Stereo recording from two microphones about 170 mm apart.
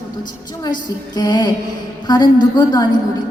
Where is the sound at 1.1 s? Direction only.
25° left (ahead or behind).